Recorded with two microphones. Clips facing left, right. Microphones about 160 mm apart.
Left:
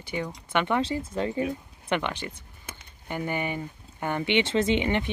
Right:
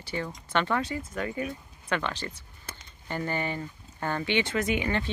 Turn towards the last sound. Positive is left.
turn(degrees=20)  # may be behind; listen again after turning